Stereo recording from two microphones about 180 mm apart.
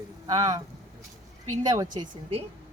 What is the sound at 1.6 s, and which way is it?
Speech, 25° right (ahead or behind).